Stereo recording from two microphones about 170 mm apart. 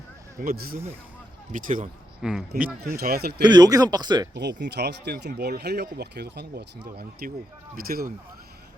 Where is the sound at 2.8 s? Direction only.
65° right (ahead or behind).